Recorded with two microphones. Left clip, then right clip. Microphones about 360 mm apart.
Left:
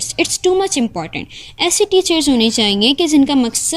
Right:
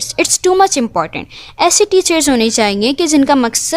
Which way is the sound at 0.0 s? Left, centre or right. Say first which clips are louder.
Right 2 dB; centre.